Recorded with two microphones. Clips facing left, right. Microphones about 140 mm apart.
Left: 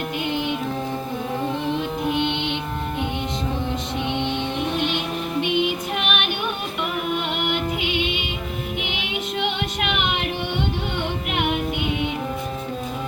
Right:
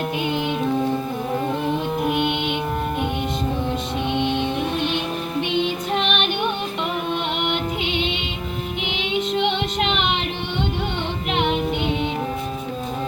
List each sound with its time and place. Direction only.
2.0 s music: 15° right (ahead or behind)
4.2 s music: 15° right (ahead or behind)
5.4 s music: 15° left (ahead or behind)
7.4 s music: 10° left (ahead or behind)